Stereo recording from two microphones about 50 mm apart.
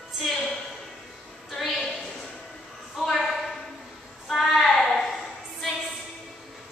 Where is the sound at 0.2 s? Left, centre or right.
Centre.